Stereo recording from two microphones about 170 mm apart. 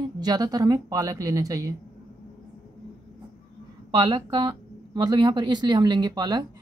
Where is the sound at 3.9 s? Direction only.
25° right (ahead or behind).